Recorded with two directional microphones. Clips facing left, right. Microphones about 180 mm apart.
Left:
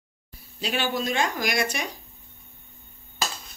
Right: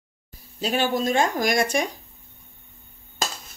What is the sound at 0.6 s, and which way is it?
Speech, 45° right (ahead or behind).